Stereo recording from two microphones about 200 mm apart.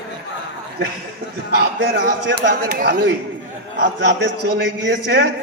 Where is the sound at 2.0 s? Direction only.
55° right (ahead or behind).